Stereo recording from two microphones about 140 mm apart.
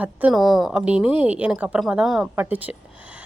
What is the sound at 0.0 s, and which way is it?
A woman's voice, 10° right (ahead or behind).